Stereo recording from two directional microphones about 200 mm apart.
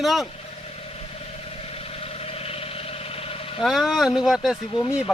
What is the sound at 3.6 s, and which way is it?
Speech, centre (ahead or behind).